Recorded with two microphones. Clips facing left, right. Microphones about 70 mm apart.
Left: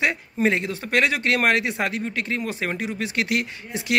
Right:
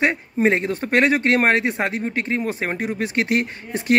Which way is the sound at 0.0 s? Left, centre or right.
Right.